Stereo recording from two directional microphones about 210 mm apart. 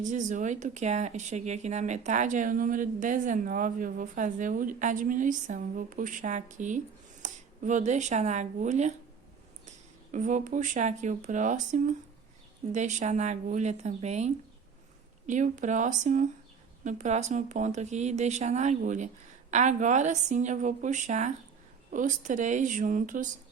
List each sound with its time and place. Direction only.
0.0 s speech: 35° right (ahead or behind)